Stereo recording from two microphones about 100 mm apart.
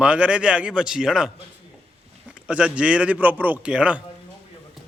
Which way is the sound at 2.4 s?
10° right (ahead or behind).